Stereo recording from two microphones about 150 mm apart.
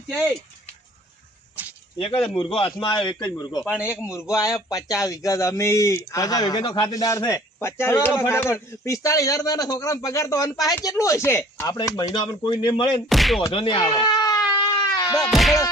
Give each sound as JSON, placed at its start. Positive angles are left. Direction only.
{"t": 1.6, "sound": "a sound", "side_deg": -10}
{"t": 2.0, "sound": "speech", "side_deg": 40}
{"t": 3.7, "sound": "a man's voice", "side_deg": -10}
{"t": 4.0, "sound": "speech", "side_deg": 20}
{"t": 13.1, "sound": "speech", "side_deg": 0}
{"t": 13.5, "sound": "goat", "side_deg": 35}
{"t": 15.3, "sound": "a sound", "side_deg": 0}